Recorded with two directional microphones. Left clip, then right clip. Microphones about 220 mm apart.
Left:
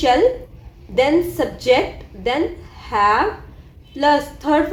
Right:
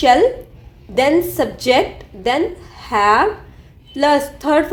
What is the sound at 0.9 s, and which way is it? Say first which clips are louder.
A woman's voice: right 2 dB; 40° right (ahead or behind).